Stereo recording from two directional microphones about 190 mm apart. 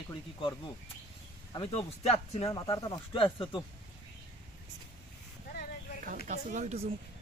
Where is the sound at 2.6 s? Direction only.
20° left (ahead or behind).